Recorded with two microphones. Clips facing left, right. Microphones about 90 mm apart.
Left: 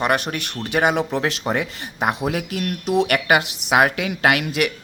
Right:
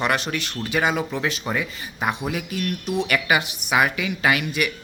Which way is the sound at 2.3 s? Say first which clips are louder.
Left 3 dB; 70° left (ahead or behind).